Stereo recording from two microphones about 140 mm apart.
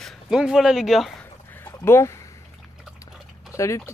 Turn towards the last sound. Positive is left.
turn(degrees=20)  # may be behind; listen again after turning